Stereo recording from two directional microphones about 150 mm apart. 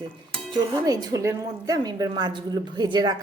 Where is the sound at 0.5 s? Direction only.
25° right (ahead or behind).